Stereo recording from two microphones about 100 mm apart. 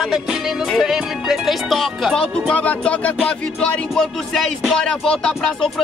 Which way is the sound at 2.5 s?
10° left (ahead or behind).